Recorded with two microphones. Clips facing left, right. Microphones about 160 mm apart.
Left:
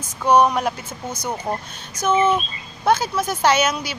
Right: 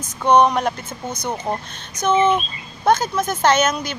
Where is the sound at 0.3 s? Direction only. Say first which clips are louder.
Right 1 dB; 10° left (ahead or behind).